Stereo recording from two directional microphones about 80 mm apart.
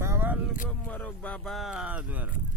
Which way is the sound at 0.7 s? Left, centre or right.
Centre.